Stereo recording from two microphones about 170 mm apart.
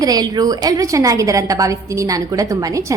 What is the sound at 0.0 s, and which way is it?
A woman's voice, 20° right (ahead or behind).